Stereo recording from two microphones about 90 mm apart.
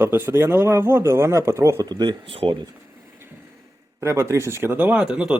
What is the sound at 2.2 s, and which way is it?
Speech, 90° right.